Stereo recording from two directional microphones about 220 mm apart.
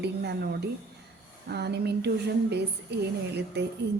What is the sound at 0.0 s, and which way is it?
A woman's voice, 50° right (ahead or behind).